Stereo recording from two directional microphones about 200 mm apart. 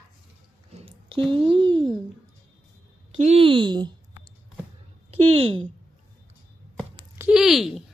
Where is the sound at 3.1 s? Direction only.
35° right (ahead or behind).